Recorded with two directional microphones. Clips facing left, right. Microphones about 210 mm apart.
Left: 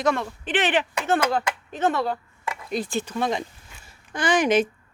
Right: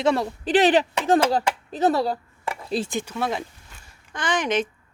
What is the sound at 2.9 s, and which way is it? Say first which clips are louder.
Speech: left 1 dB; 10° right (ahead or behind).